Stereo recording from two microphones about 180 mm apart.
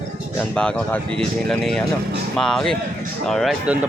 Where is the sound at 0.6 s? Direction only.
5° left (ahead or behind).